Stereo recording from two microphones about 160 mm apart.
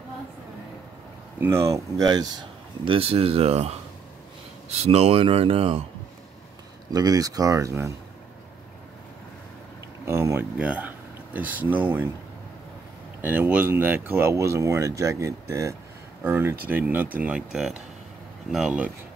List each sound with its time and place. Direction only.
1.4 s speech: 15° right (ahead or behind); by 5.8 s 35° right (ahead or behind)
6.9 s speech: 25° right (ahead or behind)
10.0 s speech: 15° right (ahead or behind)
10.6 s speech: 5° right (ahead or behind)
13.2 s speech: 10° right (ahead or behind)